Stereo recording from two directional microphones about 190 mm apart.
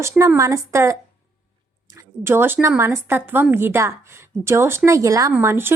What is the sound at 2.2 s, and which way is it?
Speech, 10° right (ahead or behind).